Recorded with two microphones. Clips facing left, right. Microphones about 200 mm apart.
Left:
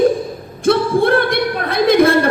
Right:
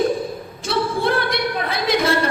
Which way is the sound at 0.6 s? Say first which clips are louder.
Left 8 dB; 55° left (ahead or behind).